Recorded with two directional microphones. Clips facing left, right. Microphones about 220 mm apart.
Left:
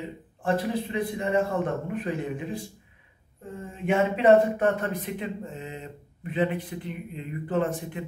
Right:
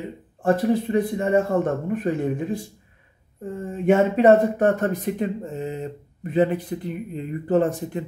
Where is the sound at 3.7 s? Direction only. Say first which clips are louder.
Right 6 dB; 40° right (ahead or behind).